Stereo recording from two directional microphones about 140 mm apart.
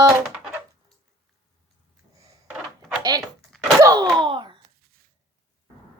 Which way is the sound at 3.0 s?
25° right (ahead or behind).